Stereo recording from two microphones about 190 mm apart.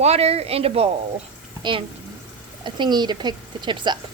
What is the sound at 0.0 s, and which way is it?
Speech, 35° right (ahead or behind).